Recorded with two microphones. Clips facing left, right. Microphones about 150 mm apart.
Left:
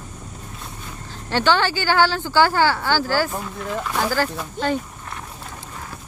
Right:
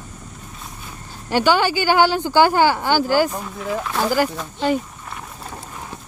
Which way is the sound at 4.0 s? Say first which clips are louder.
Right 3 dB; 15° right (ahead or behind).